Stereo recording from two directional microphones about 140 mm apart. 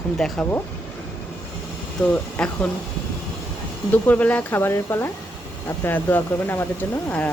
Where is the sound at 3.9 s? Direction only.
10° left (ahead or behind).